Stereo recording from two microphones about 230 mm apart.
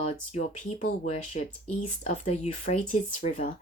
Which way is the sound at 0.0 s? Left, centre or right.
Left.